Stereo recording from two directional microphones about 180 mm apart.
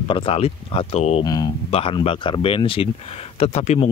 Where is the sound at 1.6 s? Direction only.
30° left (ahead or behind).